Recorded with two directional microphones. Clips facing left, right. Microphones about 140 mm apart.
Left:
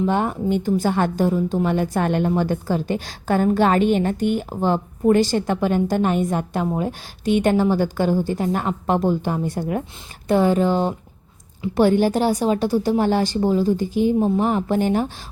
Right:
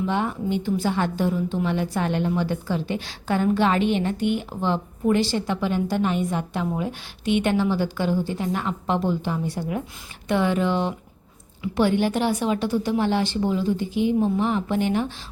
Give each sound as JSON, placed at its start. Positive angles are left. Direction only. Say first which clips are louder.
{"t": 0.0, "sound": "a woman's voice", "louder": "left 4 dB", "side_deg": 45}
{"t": 10.2, "sound": "a woman's voice", "louder": "left 5 dB", "side_deg": 40}